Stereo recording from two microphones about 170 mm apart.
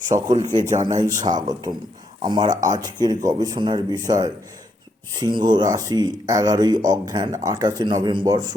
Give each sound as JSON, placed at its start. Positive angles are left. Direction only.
{"t": 0.1, "sound": "speech", "side_deg": -45}
{"t": 0.9, "sound": "speech", "side_deg": -25}
{"t": 2.5, "sound": "speech", "side_deg": -45}
{"t": 2.7, "sound": "speech", "side_deg": -25}